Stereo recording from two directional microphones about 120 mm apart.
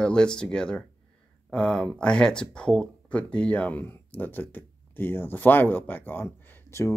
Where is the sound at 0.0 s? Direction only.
5° left (ahead or behind).